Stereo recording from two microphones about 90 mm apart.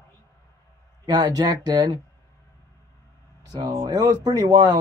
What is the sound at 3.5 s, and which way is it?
Speech, 40° right (ahead or behind).